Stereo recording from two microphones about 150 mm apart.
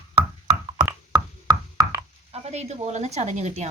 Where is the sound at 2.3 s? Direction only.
45° right (ahead or behind).